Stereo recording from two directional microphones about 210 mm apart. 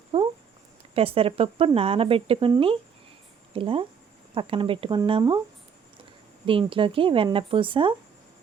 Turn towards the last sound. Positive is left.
turn(degrees=-25)  # may be behind; listen again after turning